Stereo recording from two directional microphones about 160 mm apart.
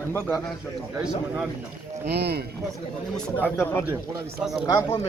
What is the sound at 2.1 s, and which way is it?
Speech, 90° right.